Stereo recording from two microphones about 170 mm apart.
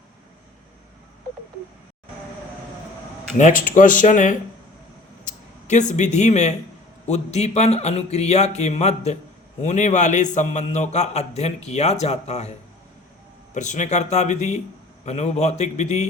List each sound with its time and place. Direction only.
3.3 s speech: 50° left (ahead or behind)
5.2 s a sound: 45° left (ahead or behind)
5.9 s a man's voice: 45° left (ahead or behind)